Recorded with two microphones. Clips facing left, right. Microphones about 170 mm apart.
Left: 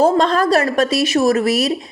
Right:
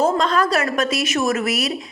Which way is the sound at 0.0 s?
35° left (ahead or behind).